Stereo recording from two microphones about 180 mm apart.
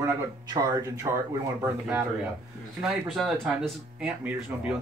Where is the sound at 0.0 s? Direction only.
20° right (ahead or behind).